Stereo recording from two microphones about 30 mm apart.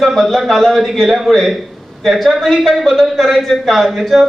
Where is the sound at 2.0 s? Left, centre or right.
Centre.